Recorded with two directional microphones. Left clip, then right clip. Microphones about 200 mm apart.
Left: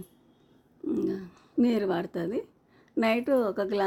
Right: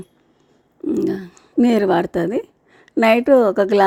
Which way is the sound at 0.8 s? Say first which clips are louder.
Right 10 dB; 35° right (ahead or behind).